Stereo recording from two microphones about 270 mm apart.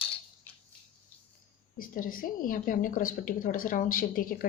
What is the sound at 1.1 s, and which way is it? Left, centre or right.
Cricket, centre.